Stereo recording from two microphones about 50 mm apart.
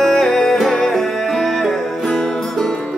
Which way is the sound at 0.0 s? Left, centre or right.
Centre.